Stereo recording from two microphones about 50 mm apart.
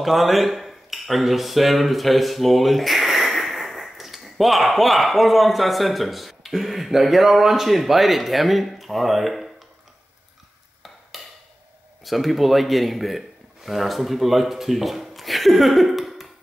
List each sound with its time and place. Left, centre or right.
0.0 s speech: centre
12.0 s speech: centre